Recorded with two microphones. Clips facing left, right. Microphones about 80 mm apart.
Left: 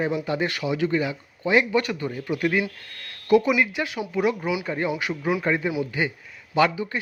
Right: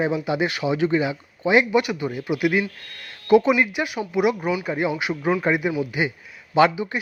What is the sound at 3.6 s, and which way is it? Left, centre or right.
A man's voice, centre.